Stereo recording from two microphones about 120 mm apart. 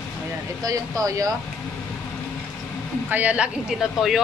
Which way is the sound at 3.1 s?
10° right (ahead or behind).